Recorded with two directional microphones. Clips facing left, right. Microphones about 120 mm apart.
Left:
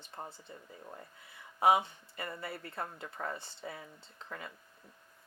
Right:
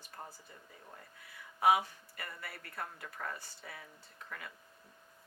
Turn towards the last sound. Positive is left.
turn(degrees=25)  # may be behind; listen again after turning